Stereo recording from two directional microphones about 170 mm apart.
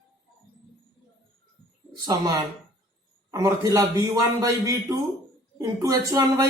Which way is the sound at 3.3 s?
20° right (ahead or behind).